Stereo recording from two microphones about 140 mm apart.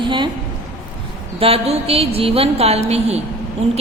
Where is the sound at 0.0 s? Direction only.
35° right (ahead or behind).